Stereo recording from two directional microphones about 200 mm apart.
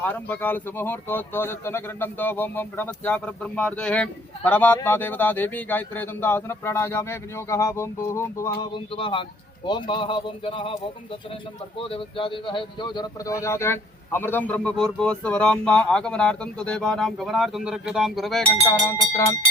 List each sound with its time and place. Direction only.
0.0 s speech: 10° left (ahead or behind); by 10.8 s 25° left (ahead or behind)
11.8 s speech: 25° left (ahead or behind); by 18.4 s centre (ahead or behind)
19.1 s speech: 15° left (ahead or behind)